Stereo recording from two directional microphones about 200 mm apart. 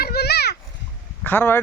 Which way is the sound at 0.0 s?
50° left (ahead or behind).